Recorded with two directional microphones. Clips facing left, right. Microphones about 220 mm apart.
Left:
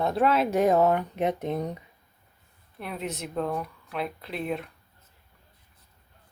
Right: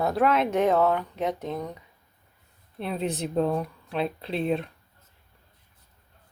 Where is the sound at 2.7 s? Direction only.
30° right (ahead or behind).